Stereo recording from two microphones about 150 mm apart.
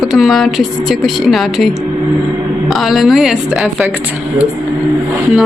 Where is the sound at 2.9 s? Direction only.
Centre (ahead or behind).